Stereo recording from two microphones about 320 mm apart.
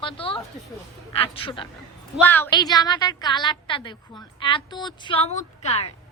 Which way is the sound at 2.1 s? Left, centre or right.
Centre.